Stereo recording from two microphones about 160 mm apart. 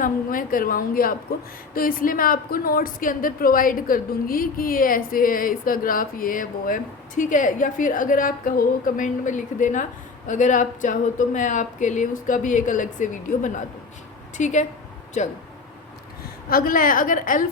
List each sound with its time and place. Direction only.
0.0 s a woman's voice: 60° left (ahead or behind)
16.5 s a woman's voice: 65° left (ahead or behind)